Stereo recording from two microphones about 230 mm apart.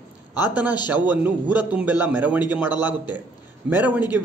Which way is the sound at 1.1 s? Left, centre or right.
Centre.